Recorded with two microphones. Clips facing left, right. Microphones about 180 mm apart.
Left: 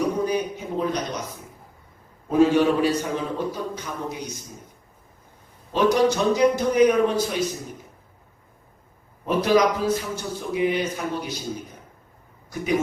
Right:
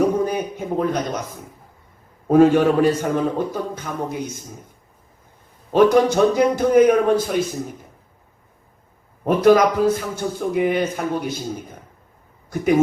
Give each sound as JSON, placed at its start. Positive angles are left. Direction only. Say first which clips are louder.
{"t": 0.3, "sound": "a sound", "louder": "right 2 dB", "side_deg": -50}
{"t": 2.2, "sound": "a man's voice", "louder": "right 4 dB", "side_deg": -50}
{"t": 5.7, "sound": "a man's voice", "louder": "right 5 dB", "side_deg": -50}
{"t": 9.2, "sound": "a man's voice", "louder": "right 5 dB", "side_deg": -50}